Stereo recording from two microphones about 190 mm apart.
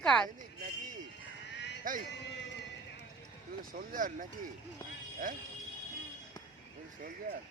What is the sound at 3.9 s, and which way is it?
Speech, 45° right (ahead or behind).